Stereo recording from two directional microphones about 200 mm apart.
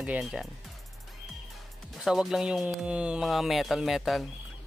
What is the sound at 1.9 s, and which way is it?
Speech, centre (ahead or behind).